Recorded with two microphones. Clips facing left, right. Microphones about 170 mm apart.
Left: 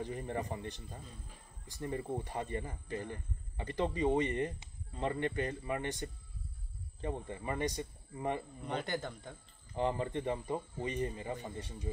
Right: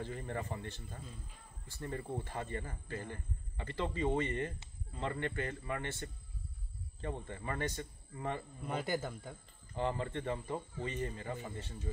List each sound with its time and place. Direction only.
0.0 s speech: 15° left (ahead or behind)
8.6 s speech: 5° right (ahead or behind)
9.8 s speech: 15° left (ahead or behind)